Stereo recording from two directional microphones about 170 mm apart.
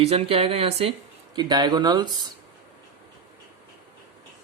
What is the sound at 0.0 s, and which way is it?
Speech, 35° right (ahead or behind).